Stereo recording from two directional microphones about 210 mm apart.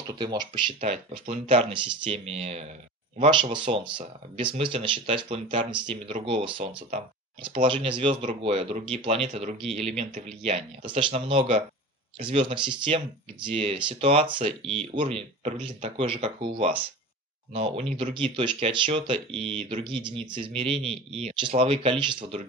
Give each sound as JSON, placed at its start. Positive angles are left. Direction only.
{"t": 0.0, "sound": "speech", "side_deg": -20}
{"t": 7.6, "sound": "speech", "side_deg": -25}